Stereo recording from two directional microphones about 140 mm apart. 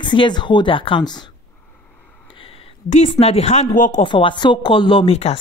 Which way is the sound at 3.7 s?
65° left (ahead or behind).